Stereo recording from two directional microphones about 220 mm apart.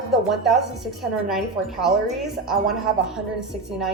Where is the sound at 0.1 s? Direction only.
Centre (ahead or behind).